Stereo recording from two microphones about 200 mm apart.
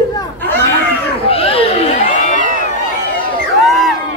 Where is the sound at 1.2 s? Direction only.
30° left (ahead or behind).